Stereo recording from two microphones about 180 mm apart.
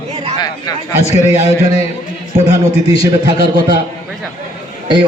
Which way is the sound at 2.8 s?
20° right (ahead or behind).